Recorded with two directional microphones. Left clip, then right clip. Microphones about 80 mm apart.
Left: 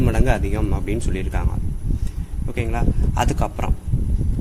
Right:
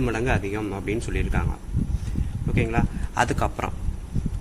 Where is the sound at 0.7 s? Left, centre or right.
Left.